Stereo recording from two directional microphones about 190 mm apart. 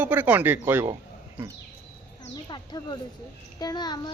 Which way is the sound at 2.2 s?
20° left (ahead or behind).